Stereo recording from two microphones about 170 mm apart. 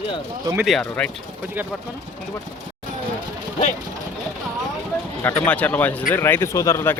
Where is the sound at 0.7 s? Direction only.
5° left (ahead or behind).